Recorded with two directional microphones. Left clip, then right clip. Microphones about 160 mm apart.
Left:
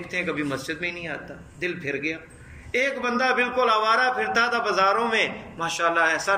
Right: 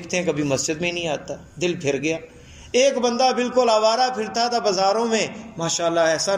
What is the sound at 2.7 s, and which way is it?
A man's voice, 40° right (ahead or behind).